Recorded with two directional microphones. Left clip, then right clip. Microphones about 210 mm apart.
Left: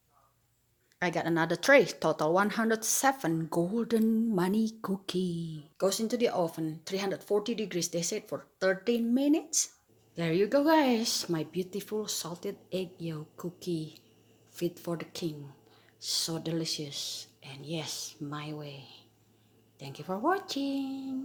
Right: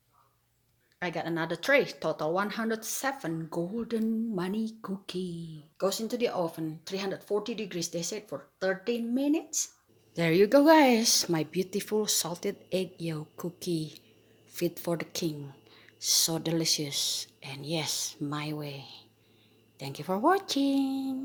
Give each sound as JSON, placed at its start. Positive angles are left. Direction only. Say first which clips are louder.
{"t": 0.9, "sound": "a woman's voice", "louder": "left 3 dB", "side_deg": 25}
{"t": 5.7, "sound": "speech", "louder": "left 1 dB", "side_deg": 15}
{"t": 10.2, "sound": "speech", "louder": "right 5 dB", "side_deg": -25}